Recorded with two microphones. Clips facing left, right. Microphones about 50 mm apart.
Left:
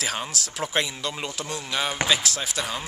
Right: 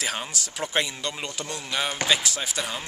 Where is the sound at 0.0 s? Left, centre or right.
Centre.